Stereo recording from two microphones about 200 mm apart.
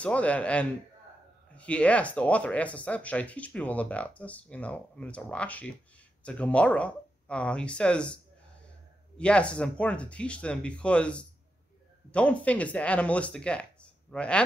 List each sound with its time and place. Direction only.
0.0 s speech: 5° left (ahead or behind)
9.2 s speech: 5° left (ahead or behind)